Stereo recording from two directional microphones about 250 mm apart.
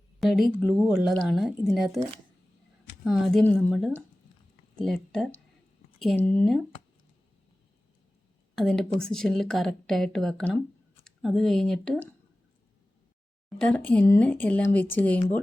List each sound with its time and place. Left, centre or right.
0.2 s a woman's voice: centre
3.0 s a woman's voice: centre
8.5 s a woman's voice: centre
13.6 s a woman's voice: centre